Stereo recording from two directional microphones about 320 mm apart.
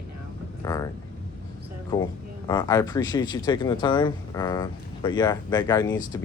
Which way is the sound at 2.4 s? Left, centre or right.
Centre.